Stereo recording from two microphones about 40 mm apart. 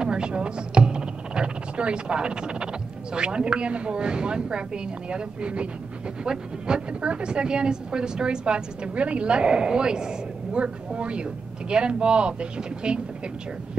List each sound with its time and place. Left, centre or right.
0.0 s a woman's voice: right